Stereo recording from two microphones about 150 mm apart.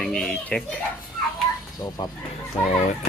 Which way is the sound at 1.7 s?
25° left (ahead or behind).